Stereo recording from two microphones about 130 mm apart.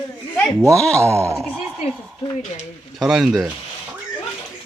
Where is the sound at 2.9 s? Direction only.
5° right (ahead or behind).